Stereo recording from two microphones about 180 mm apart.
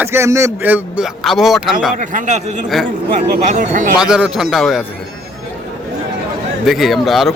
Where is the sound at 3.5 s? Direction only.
45° right (ahead or behind).